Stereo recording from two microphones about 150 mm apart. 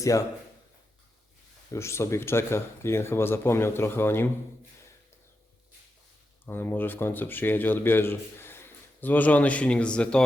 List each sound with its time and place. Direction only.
0.0 s speech: 20° left (ahead or behind)
1.7 s speech: 20° left (ahead or behind)
6.4 s speech: 15° left (ahead or behind)